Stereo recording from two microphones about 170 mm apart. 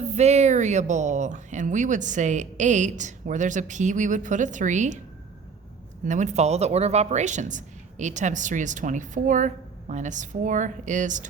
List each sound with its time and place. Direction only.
0.0 s a woman's voice: 40° right (ahead or behind)
6.1 s a woman's voice: 45° right (ahead or behind)